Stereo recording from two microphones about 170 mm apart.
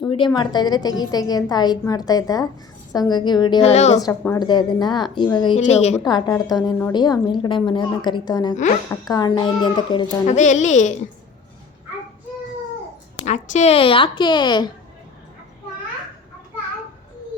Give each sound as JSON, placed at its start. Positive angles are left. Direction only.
{"t": 0.0, "sound": "a woman's voice", "side_deg": 30}
{"t": 3.6, "sound": "a woman's voice", "side_deg": 40}
{"t": 4.4, "sound": "a woman's voice", "side_deg": 25}
{"t": 5.5, "sound": "a woman's voice", "side_deg": 40}
{"t": 6.0, "sound": "a woman's voice", "side_deg": 25}
{"t": 10.2, "sound": "a woman's voice", "side_deg": 45}
{"t": 13.2, "sound": "a woman's voice", "side_deg": 40}